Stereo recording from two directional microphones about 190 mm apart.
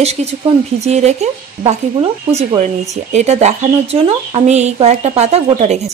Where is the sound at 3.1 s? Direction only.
35° right (ahead or behind).